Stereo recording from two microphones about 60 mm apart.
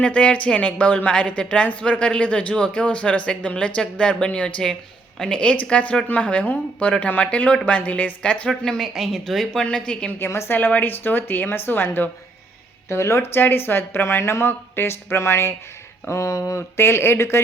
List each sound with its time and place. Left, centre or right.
0.0 s speech: centre
4.6 s a woman's voice: centre
8.4 s a woman's voice: centre
10.1 s speech: left
10.6 s speech: left
12.9 s speech: left
13.4 s speech: left
16.0 s speech: left
16.6 s speech: left